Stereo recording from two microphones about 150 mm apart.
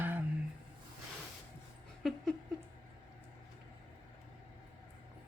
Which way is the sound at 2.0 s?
Centre (ahead or behind).